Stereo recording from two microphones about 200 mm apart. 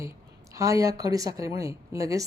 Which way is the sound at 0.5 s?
15° right (ahead or behind).